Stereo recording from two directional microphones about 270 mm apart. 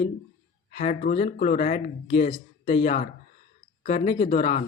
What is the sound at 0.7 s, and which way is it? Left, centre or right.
Speech, left.